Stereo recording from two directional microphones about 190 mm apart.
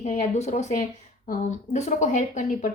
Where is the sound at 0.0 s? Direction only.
40° left (ahead or behind).